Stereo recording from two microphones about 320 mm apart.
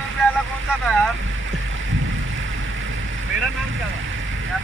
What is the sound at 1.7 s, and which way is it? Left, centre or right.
Boat, right.